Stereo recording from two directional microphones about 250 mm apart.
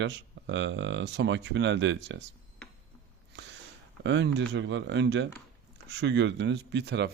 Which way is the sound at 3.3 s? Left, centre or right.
Right.